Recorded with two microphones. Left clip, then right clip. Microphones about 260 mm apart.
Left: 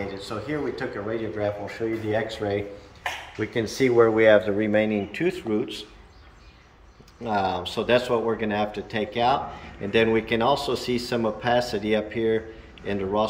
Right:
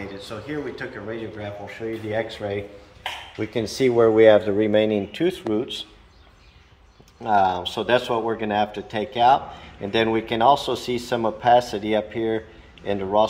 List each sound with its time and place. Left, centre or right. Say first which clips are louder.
0.1 s speech: left 1 dB; centre
3.5 s speech: even; right
7.2 s speech: right 6 dB; centre